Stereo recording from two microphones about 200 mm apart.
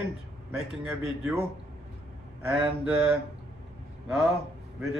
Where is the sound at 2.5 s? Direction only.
5° right (ahead or behind).